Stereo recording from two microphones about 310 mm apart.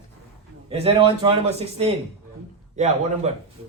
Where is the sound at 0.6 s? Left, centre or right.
Centre.